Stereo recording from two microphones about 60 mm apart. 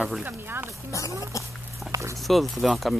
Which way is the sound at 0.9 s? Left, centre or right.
Left.